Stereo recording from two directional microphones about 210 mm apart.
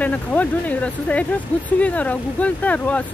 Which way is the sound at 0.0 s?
5° left (ahead or behind).